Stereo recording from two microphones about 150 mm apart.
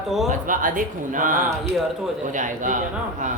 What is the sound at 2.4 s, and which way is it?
Speech, 55° right (ahead or behind).